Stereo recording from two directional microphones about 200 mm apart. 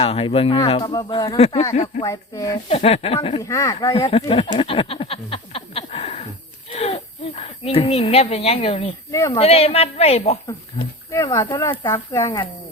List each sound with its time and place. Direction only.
0.0 s speech: 30° left (ahead or behind)
2.6 s speech: 30° left (ahead or behind)
3.4 s speech: 15° left (ahead or behind)
4.5 s a sound: 25° left (ahead or behind)
7.6 s speech: 30° left (ahead or behind)
9.1 s speech: 15° left (ahead or behind)
9.4 s speech: 30° left (ahead or behind)